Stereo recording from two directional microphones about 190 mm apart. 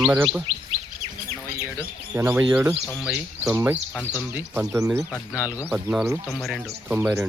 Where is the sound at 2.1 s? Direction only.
10° right (ahead or behind).